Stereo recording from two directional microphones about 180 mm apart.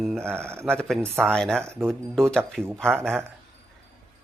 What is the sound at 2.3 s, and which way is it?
Speech, 5° left (ahead or behind).